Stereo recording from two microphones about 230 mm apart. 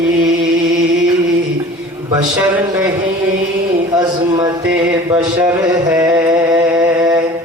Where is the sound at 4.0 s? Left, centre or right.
Centre.